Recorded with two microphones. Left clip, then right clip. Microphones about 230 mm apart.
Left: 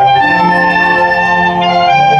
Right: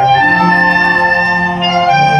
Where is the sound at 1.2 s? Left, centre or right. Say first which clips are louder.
Left 3 dB; left.